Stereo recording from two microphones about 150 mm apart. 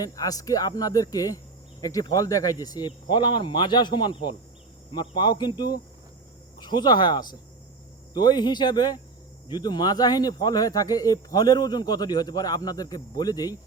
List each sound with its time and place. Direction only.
0.0 s speech: 25° left (ahead or behind)